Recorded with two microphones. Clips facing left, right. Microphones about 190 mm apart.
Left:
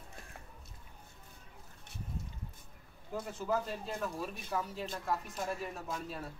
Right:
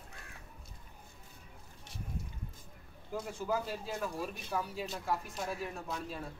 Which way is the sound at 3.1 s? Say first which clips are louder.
Even; centre (ahead or behind).